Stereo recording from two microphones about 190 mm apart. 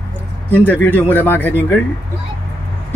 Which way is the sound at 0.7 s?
10° left (ahead or behind).